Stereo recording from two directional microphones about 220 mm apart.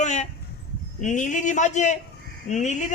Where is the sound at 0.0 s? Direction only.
30° left (ahead or behind).